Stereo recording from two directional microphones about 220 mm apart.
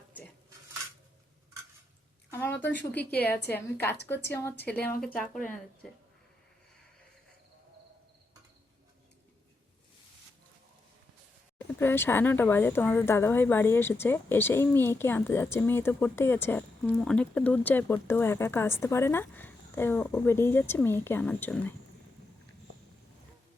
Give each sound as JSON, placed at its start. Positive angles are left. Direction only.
{"t": 2.3, "sound": "a sound", "side_deg": 10}
{"t": 3.2, "sound": "a woman's voice", "side_deg": 10}
{"t": 5.0, "sound": "speech", "side_deg": 40}
{"t": 11.8, "sound": "a woman's voice", "side_deg": 10}